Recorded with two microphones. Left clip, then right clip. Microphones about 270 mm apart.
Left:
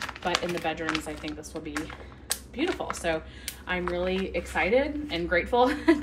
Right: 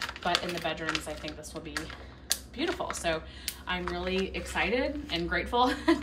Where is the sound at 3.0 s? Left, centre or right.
Centre.